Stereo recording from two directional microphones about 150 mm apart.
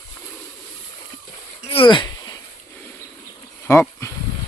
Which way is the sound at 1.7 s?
35° left (ahead or behind).